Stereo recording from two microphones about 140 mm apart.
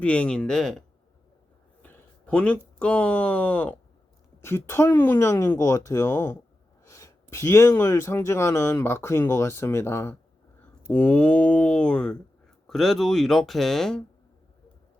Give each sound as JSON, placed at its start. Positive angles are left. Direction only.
{"t": 0.0, "sound": "speech", "side_deg": 10}
{"t": 1.8, "sound": "speech", "side_deg": 10}